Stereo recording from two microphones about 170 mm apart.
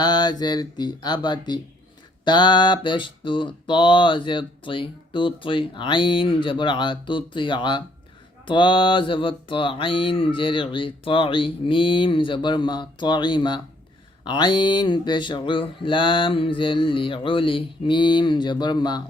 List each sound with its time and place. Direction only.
0.0 s mantra: 25° left (ahead or behind)